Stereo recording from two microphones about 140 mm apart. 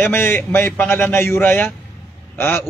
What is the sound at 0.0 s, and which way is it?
A man's voice, 15° left (ahead or behind).